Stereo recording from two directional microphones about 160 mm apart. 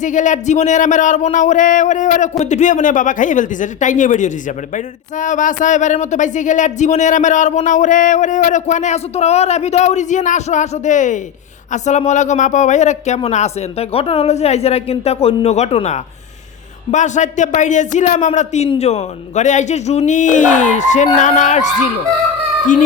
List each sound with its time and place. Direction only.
0.0 s speech: 50° left (ahead or behind)